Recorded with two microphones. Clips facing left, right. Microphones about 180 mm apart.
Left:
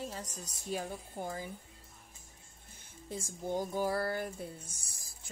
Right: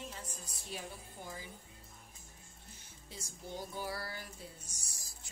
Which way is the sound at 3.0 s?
50° left (ahead or behind).